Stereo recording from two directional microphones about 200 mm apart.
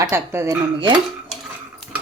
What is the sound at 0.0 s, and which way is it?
Speech, 10° right (ahead or behind).